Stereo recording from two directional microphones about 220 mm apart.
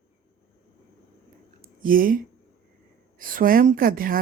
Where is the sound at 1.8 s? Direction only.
40° right (ahead or behind).